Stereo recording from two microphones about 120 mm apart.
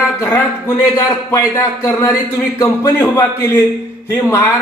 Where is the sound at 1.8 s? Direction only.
25° left (ahead or behind).